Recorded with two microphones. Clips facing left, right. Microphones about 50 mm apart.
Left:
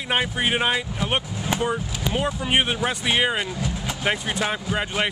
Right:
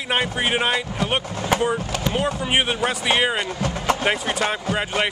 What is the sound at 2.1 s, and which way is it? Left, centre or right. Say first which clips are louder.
Speech: even; centre.